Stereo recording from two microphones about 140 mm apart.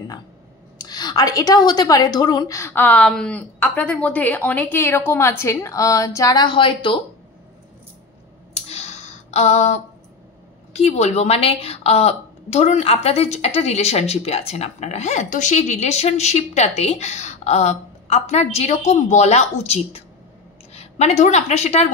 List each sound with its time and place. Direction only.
0.7 s a woman's voice: 30° left (ahead or behind)
8.5 s a sound: 50° left (ahead or behind)
10.7 s a woman's voice: 50° left (ahead or behind)